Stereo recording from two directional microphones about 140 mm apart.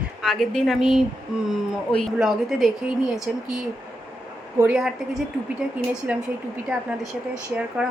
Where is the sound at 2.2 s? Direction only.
Centre (ahead or behind).